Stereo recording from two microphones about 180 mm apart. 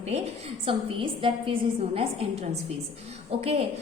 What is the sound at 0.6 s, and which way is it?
A woman's voice, 30° right (ahead or behind).